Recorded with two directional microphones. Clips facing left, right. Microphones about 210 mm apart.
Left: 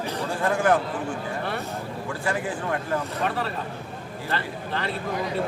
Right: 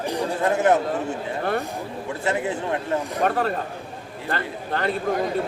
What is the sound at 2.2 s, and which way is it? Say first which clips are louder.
Speech: right 4 dB; 25° right (ahead or behind).